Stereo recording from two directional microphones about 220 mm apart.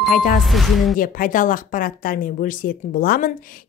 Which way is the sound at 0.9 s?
40° left (ahead or behind).